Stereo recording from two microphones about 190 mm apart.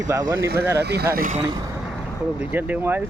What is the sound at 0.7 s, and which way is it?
Speech, 60° right (ahead or behind).